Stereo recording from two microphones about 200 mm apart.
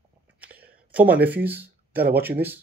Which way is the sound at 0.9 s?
10° right (ahead or behind).